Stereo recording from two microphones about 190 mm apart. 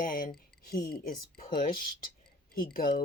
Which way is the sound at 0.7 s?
55° left (ahead or behind).